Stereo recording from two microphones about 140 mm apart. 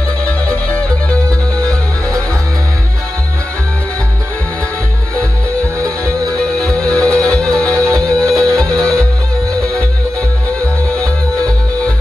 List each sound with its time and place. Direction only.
5.8 s music: 20° right (ahead or behind)
6.4 s music: 5° left (ahead or behind)
7.9 s music: 20° right (ahead or behind)